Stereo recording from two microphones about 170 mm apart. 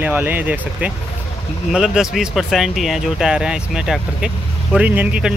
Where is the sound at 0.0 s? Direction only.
10° right (ahead or behind).